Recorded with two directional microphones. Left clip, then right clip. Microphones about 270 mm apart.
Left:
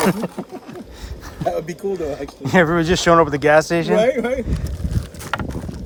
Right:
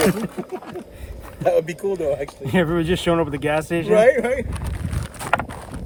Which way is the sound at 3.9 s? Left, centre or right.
Right.